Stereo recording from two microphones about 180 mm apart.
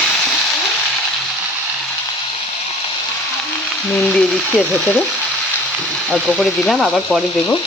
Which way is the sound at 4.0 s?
5° left (ahead or behind).